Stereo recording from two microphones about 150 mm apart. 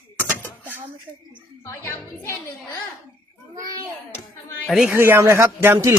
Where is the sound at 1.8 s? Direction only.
20° left (ahead or behind).